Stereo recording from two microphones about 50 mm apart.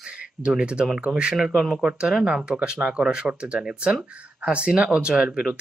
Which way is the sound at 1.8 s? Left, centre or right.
Centre.